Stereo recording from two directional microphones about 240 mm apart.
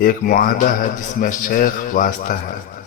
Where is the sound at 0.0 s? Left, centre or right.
Left.